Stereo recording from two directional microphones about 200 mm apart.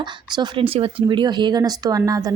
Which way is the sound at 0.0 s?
20° right (ahead or behind).